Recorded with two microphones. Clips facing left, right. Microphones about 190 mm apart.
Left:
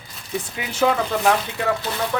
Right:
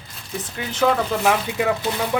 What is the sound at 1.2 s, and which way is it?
Speech, 10° right (ahead or behind).